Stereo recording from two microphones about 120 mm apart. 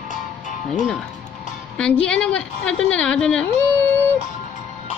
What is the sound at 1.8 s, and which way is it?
A woman's voice, 10° left (ahead or behind).